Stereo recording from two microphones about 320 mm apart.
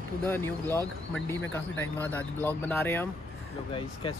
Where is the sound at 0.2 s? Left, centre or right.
Centre.